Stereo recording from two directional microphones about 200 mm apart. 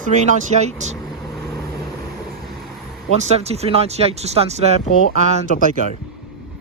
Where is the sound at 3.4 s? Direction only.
30° right (ahead or behind).